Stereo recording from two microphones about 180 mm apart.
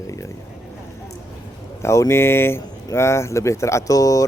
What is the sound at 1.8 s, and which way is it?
Speech, 15° left (ahead or behind).